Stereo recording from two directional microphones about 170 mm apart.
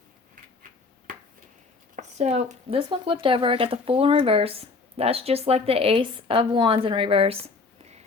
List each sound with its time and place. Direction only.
2.0 s speech: 40° right (ahead or behind)